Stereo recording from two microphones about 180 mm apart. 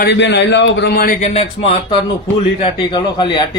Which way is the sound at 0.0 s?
75° left (ahead or behind).